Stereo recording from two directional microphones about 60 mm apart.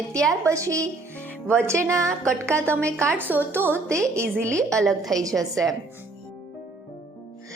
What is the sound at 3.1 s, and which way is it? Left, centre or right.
Speech, right.